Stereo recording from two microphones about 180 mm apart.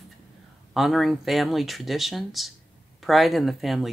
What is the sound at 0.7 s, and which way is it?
Speech, centre (ahead or behind).